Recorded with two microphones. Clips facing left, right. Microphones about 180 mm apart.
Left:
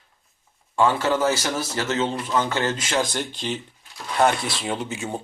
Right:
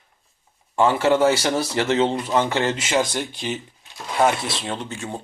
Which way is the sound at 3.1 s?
5° right (ahead or behind).